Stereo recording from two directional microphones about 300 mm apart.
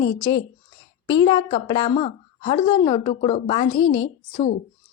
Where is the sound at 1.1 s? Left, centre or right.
Centre.